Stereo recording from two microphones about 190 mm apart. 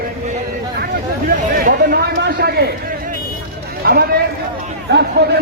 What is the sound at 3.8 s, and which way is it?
Speech, 55° right (ahead or behind).